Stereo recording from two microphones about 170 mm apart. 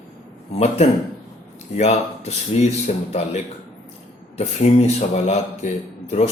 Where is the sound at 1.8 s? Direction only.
40° left (ahead or behind).